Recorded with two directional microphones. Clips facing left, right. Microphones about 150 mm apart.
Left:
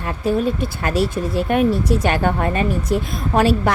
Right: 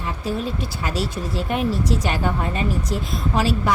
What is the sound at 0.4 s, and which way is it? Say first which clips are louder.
A woman's voice: left 6 dB; 55° left (ahead or behind).